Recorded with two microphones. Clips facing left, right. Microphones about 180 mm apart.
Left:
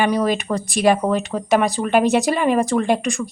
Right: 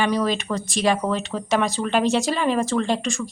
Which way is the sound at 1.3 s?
10° left (ahead or behind).